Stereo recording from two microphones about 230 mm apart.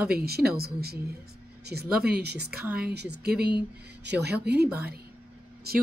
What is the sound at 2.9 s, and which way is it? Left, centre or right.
Speech, right.